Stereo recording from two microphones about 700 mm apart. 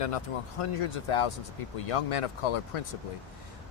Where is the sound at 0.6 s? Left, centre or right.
Left.